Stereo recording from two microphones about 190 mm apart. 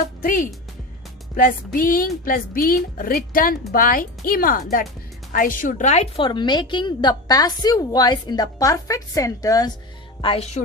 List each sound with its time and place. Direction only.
0.2 s a woman's voice: 45° left (ahead or behind); by 9.7 s 20° left (ahead or behind)
10.2 s a woman's voice: 30° left (ahead or behind)